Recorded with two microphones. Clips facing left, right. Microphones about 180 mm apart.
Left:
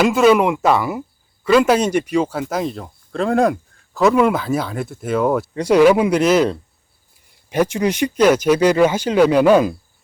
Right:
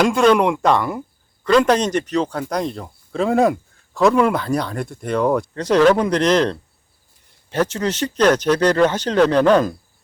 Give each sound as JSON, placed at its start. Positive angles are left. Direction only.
{"t": 0.0, "sound": "speech", "side_deg": 5}